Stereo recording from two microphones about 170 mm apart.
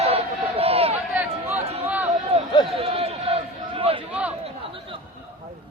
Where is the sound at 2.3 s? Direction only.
35° right (ahead or behind).